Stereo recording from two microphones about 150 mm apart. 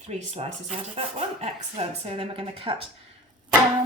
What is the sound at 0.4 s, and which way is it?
Speech, 45° right (ahead or behind).